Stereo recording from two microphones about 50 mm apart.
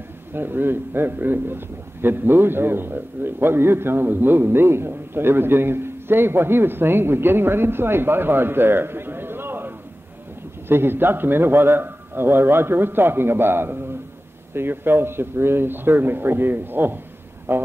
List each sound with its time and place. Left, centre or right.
0.3 s a man's voice: right